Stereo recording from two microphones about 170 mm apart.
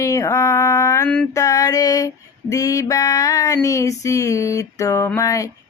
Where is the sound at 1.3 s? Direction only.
20° left (ahead or behind).